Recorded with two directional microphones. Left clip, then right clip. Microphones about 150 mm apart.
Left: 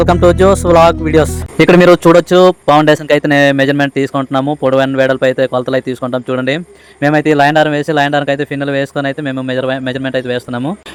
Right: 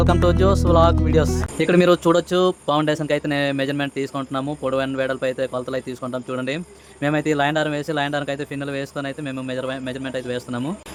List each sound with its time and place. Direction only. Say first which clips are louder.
0.0 s speech: left 10 dB; 40° left (ahead or behind)